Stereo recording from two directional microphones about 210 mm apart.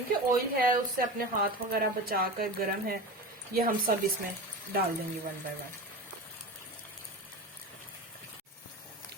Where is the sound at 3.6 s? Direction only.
40° right (ahead or behind).